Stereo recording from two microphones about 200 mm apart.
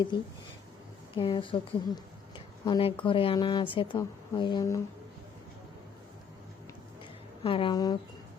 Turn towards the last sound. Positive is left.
turn(degrees=20)  # may be behind; listen again after turning